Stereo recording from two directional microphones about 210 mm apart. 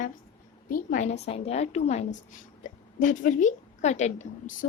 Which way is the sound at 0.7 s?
40° left (ahead or behind).